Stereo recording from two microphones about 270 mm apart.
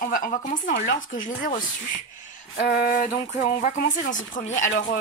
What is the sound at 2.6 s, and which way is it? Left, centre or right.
Speech, left.